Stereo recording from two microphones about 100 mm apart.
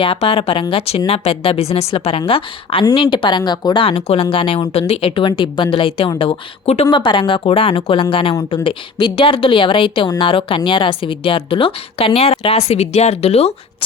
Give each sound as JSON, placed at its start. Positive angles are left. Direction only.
{"t": 0.0, "sound": "speech", "side_deg": 65}
{"t": 0.7, "sound": "speech", "side_deg": 80}
{"t": 2.9, "sound": "a woman's voice", "side_deg": 55}
{"t": 3.8, "sound": "speech", "side_deg": 70}
{"t": 6.1, "sound": "speech", "side_deg": 75}
{"t": 6.9, "sound": "speech", "side_deg": 55}